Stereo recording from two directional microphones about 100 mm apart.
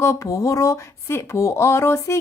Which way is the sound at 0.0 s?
30° left (ahead or behind).